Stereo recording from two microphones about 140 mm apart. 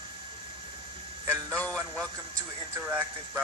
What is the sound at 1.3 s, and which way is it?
Music, 10° left (ahead or behind).